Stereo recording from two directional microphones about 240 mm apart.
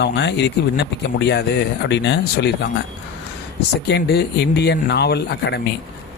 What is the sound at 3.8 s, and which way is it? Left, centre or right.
Speech, left.